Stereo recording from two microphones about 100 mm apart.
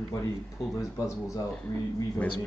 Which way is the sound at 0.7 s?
30° left (ahead or behind).